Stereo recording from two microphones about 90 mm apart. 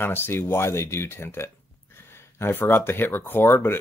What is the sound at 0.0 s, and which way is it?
Speech, 25° left (ahead or behind).